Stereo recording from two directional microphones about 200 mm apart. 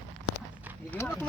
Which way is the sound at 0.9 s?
10° left (ahead or behind).